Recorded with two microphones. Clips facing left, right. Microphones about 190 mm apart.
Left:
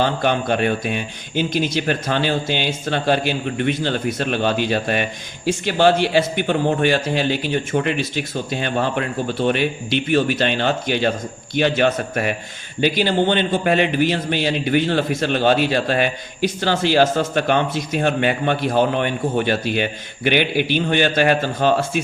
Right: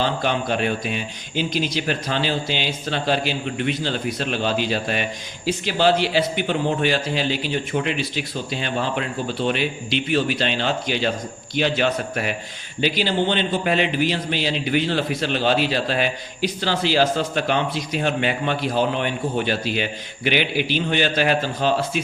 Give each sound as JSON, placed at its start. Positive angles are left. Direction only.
{"t": 0.0, "sound": "a man's voice", "side_deg": 55}